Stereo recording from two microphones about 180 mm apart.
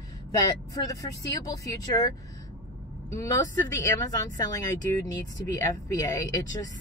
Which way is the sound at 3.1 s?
15° left (ahead or behind).